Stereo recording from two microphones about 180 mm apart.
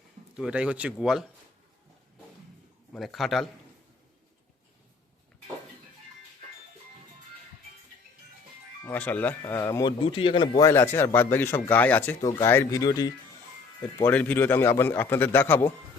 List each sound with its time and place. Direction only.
0.3 s speech: 5° right (ahead or behind)
2.9 s speech: centre (ahead or behind)
8.8 s speech: 10° left (ahead or behind)
10.0 s speech: 30° left (ahead or behind)
14.0 s speech: 10° left (ahead or behind)